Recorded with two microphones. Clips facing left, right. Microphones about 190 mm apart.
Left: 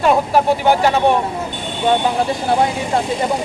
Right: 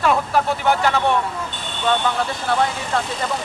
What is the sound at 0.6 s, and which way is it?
Speech, 30° left (ahead or behind).